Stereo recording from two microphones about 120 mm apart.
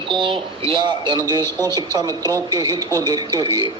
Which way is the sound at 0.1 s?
45° right (ahead or behind).